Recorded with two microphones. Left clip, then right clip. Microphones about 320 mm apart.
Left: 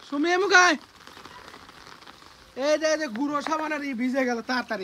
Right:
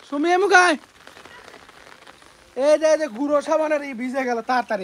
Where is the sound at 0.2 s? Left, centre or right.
Centre.